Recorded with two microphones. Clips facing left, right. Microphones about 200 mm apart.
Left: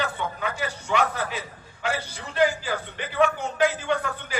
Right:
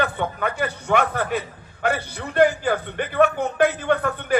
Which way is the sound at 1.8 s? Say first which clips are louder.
Right 5 dB; 55° right (ahead or behind).